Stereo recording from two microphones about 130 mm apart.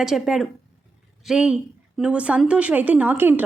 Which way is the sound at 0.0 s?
Centre (ahead or behind).